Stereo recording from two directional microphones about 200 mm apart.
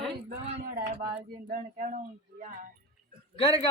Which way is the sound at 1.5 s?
40° right (ahead or behind).